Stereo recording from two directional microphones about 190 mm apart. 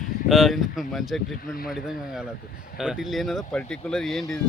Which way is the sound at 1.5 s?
50° left (ahead or behind).